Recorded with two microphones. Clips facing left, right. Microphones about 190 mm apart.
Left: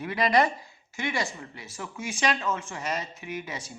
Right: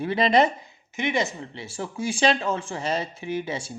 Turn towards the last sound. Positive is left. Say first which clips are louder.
# right 7 dB
turn(degrees=-30)  # may be behind; listen again after turning